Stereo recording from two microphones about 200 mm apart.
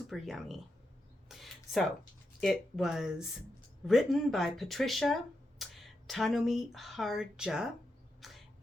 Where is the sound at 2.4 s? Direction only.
Centre (ahead or behind).